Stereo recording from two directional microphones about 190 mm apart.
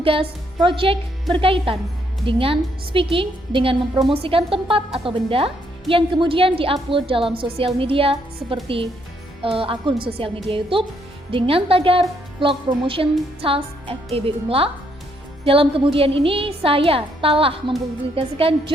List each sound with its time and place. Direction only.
0.0 s a woman's voice: 30° right (ahead or behind)